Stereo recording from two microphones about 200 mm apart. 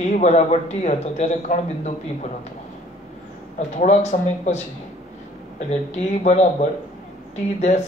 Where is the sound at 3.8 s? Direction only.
35° left (ahead or behind).